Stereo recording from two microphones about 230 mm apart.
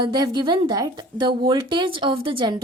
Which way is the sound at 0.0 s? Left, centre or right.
Centre.